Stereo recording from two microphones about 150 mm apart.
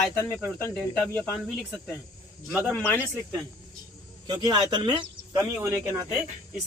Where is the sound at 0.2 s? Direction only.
15° left (ahead or behind).